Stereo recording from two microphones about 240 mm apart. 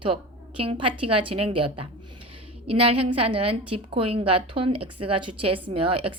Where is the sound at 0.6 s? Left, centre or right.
Right.